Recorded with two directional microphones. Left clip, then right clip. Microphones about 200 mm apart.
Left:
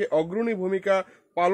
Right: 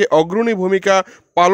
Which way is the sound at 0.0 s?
50° right (ahead or behind).